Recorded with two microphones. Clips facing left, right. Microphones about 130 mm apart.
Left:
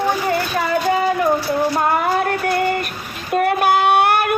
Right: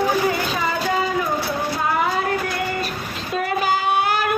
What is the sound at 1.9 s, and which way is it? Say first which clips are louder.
Music: left 3 dB; 55° left (ahead or behind).